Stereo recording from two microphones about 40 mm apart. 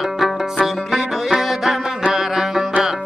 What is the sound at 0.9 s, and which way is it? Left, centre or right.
Music, centre.